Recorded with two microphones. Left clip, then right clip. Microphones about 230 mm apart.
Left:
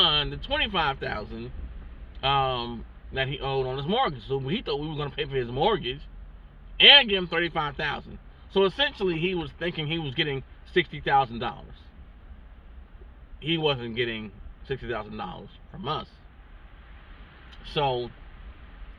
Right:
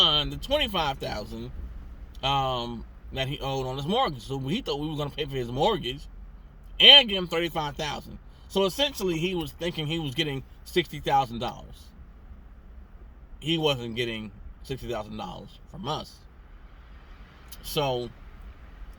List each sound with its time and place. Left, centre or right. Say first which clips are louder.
0.0 s speech: even; right
2.2 s speech: left 2 dB; centre
13.4 s speech: even; centre
17.7 s speech: left 1 dB; right